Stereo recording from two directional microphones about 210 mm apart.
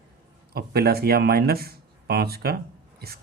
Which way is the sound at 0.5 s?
50° right (ahead or behind).